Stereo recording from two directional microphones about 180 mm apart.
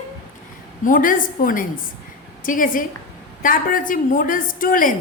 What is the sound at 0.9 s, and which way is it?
A woman's voice, 50° left (ahead or behind).